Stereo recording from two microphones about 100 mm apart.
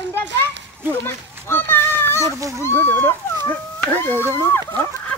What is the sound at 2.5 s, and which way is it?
Speech, 25° left (ahead or behind).